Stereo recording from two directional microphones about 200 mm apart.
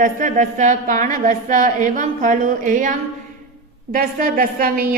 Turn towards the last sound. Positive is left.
turn(degrees=-45)  # may be behind; listen again after turning